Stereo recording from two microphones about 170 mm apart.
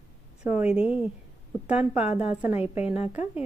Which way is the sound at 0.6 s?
10° right (ahead or behind).